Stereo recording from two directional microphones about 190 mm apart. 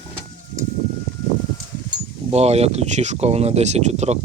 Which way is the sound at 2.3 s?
35° right (ahead or behind).